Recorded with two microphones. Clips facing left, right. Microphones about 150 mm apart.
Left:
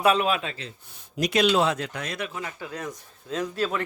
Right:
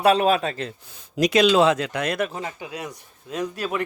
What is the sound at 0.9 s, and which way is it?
Speech, 90° right.